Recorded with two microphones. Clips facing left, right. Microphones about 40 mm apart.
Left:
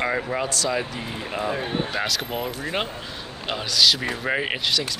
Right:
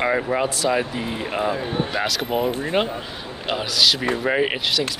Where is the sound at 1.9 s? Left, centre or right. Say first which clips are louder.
Right 3 dB; centre.